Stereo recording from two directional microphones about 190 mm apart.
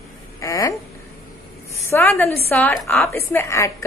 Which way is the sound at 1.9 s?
10° left (ahead or behind).